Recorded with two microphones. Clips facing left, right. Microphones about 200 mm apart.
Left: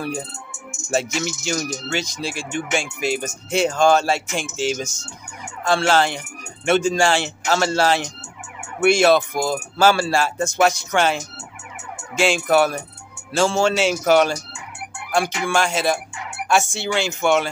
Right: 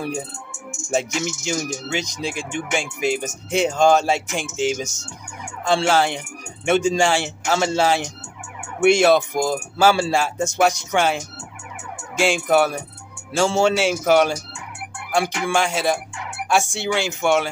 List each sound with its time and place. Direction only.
0.8 s speech: 15° right (ahead or behind)
12.4 s speech: 10° right (ahead or behind)